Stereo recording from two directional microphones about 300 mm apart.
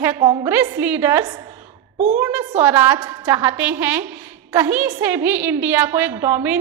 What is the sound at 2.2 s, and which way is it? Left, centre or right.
A woman's voice, centre.